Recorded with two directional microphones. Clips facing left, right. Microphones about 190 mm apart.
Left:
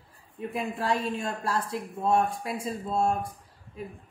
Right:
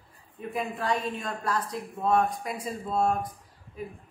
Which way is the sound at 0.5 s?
30° left (ahead or behind).